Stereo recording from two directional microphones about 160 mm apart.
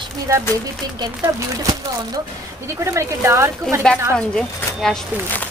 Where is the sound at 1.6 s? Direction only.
25° right (ahead or behind).